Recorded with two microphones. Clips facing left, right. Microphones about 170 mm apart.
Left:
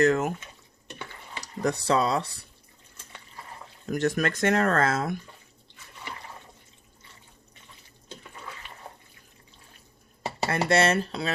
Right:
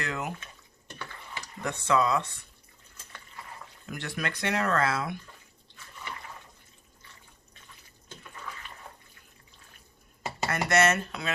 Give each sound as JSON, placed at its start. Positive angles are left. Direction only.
{"t": 0.0, "sound": "speech", "side_deg": 45}
{"t": 1.6, "sound": "speech", "side_deg": 35}
{"t": 3.8, "sound": "speech", "side_deg": 45}
{"t": 10.2, "sound": "speech", "side_deg": 30}